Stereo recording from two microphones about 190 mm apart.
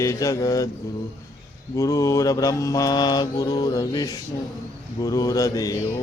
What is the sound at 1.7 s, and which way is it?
Mantra, 15° left (ahead or behind).